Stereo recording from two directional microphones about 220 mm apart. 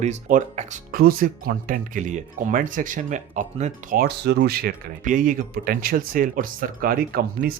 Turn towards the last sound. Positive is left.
turn(degrees=-40)  # may be behind; listen again after turning